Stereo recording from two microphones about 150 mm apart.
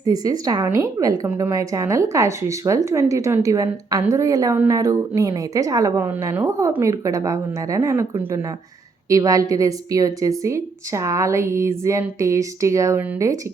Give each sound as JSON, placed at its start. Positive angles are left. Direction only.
{"t": 0.1, "sound": "a woman's voice", "side_deg": -25}
{"t": 6.1, "sound": "a woman's voice", "side_deg": -10}
{"t": 9.0, "sound": "a woman's voice", "side_deg": -20}